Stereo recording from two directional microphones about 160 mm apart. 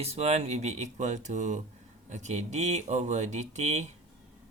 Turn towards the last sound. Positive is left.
turn(degrees=-45)  # may be behind; listen again after turning